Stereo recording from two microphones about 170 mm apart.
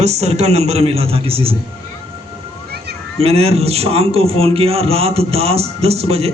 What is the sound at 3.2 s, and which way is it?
A man's voice, 35° right (ahead or behind).